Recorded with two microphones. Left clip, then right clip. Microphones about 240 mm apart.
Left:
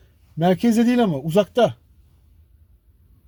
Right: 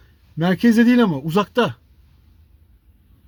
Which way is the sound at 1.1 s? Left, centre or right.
Left.